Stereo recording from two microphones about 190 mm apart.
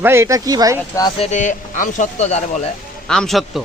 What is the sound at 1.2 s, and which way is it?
Speech, 40° left (ahead or behind).